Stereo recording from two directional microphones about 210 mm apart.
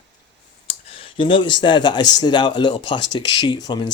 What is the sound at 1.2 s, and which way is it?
Speech, 25° left (ahead or behind).